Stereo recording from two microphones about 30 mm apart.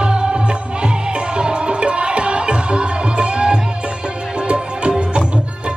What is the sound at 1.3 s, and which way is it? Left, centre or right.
Music, right.